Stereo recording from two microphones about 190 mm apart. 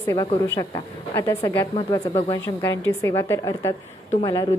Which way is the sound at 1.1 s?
15° left (ahead or behind).